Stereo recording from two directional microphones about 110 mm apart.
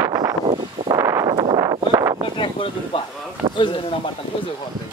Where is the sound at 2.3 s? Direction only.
50° left (ahead or behind).